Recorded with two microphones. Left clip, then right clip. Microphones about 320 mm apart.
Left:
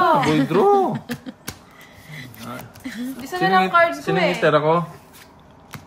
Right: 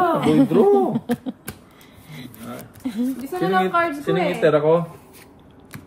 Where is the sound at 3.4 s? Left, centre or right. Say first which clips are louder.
Left 4 dB; left.